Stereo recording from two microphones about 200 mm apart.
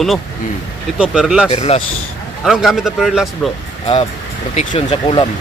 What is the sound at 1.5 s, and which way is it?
Speech, 30° left (ahead or behind).